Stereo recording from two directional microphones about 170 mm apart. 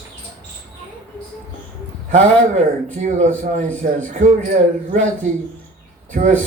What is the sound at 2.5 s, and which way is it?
Speech, 45° right (ahead or behind).